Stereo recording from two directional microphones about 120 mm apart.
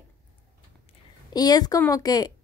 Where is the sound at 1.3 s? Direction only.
35° left (ahead or behind).